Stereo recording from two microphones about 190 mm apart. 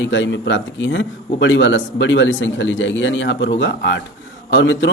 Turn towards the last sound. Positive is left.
turn(degrees=80)